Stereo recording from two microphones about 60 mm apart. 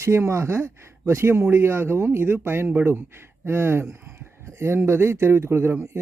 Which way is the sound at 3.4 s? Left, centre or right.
Right.